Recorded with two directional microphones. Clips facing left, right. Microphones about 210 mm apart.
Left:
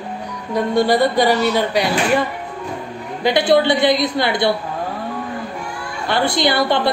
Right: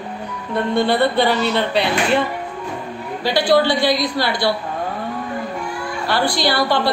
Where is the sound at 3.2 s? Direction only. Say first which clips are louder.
Left 2 dB; 20° left (ahead or behind).